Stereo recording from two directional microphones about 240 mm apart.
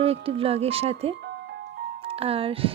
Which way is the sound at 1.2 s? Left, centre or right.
Right.